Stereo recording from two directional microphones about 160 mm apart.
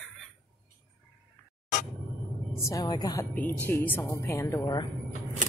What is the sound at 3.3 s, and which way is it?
A woman's voice, 10° left (ahead or behind).